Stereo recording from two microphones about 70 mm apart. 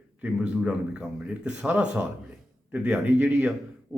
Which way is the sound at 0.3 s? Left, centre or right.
Centre.